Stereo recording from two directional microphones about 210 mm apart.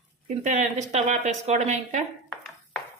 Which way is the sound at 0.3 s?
35° right (ahead or behind).